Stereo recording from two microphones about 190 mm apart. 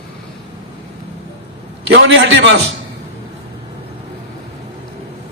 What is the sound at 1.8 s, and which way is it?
Speech, 75° right (ahead or behind).